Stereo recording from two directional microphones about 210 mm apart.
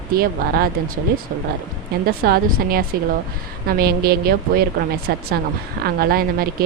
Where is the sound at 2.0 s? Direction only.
45° right (ahead or behind).